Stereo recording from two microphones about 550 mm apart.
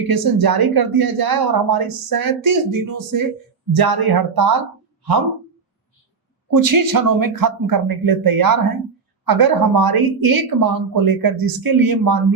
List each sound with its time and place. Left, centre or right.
0.1 s speech: right
6.6 s speech: right